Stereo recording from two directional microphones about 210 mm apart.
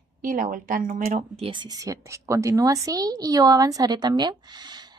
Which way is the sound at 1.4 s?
20° right (ahead or behind).